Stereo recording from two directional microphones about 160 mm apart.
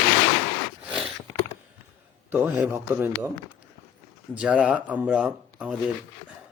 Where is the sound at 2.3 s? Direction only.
10° right (ahead or behind).